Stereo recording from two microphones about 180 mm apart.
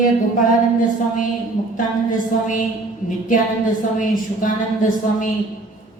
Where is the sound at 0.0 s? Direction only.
50° left (ahead or behind).